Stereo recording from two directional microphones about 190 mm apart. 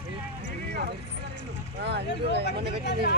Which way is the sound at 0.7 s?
60° right (ahead or behind).